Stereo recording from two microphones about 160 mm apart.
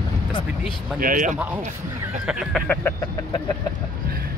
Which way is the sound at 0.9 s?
60° right (ahead or behind).